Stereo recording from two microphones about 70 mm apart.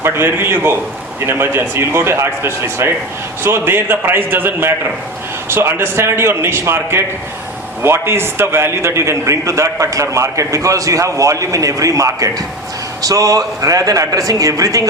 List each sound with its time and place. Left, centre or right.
0.0 s a man's voice: right